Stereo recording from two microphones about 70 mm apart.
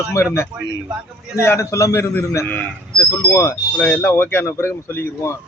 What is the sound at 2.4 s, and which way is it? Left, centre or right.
Speech, left.